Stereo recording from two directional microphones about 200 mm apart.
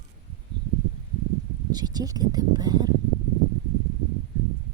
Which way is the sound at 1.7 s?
20° right (ahead or behind).